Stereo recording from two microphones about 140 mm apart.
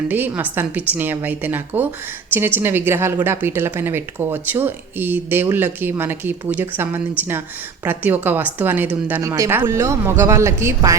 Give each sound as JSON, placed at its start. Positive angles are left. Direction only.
{"t": 0.1, "sound": "speech", "side_deg": -15}